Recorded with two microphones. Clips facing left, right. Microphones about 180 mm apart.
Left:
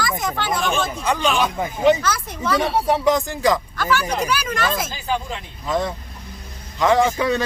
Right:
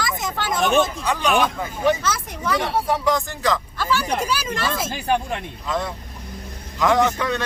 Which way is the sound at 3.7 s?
30° right (ahead or behind).